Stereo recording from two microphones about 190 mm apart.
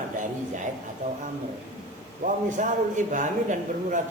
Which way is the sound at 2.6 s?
40° right (ahead or behind).